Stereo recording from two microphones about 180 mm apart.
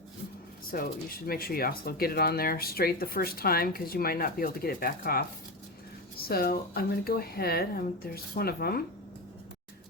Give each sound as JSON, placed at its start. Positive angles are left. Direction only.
{"t": 0.7, "sound": "speech", "side_deg": 55}